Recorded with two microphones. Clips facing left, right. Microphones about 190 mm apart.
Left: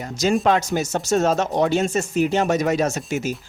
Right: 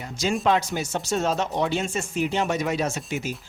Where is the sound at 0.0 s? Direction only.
45° left (ahead or behind).